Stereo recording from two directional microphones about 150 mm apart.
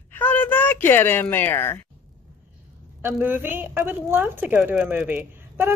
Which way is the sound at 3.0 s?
15° right (ahead or behind).